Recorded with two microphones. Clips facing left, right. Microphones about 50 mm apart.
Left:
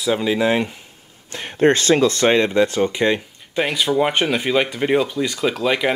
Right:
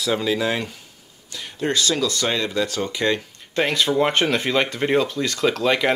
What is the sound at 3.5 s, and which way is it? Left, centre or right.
Speech, centre.